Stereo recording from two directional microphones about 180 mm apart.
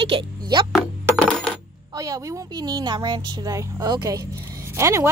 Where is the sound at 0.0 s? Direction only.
25° right (ahead or behind).